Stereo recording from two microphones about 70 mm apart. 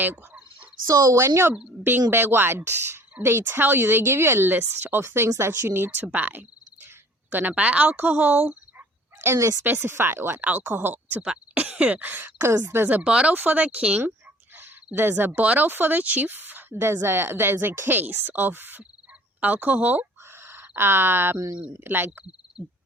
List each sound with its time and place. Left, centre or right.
0.0 s a sound: right
0.9 s speech: right
2.0 s speech: right
9.2 s speech: right
9.6 s speech: right
12.9 s speech: centre
13.3 s speech: right
14.9 s speech: right
21.3 s speech: right
21.7 s speech: right